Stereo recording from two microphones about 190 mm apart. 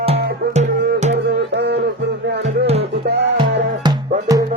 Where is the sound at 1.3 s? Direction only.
60° right (ahead or behind).